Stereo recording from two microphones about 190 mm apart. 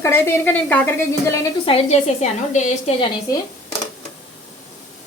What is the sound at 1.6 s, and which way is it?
A woman's voice, 35° left (ahead or behind).